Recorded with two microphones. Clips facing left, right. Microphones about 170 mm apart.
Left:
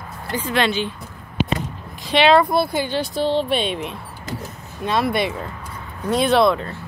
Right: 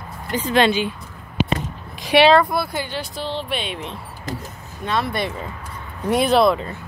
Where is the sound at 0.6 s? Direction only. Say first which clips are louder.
Right 4 dB; 10° right (ahead or behind).